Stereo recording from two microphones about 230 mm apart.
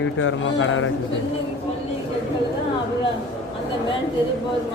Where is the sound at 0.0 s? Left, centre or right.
Left.